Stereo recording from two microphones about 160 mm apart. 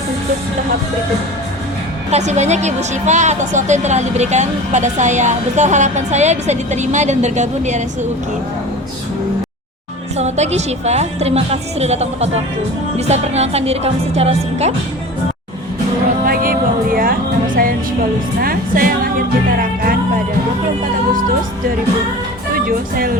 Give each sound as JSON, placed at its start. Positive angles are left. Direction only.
{"t": 2.0, "sound": "speech", "side_deg": -45}
{"t": 10.2, "sound": "a woman's voice", "side_deg": -45}
{"t": 16.2, "sound": "music", "side_deg": -65}
{"t": 22.5, "sound": "speech", "side_deg": -65}